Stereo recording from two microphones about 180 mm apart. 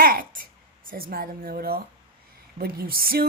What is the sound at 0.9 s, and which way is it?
Speech, 55° right (ahead or behind).